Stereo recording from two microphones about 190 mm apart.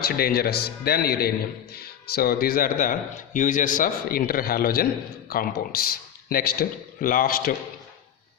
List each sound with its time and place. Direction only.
0.0 s speech: 50° left (ahead or behind)